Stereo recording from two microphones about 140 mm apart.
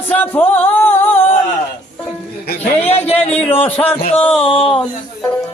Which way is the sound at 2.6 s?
45° left (ahead or behind).